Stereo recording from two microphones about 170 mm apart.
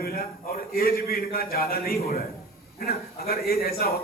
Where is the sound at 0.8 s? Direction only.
65° left (ahead or behind).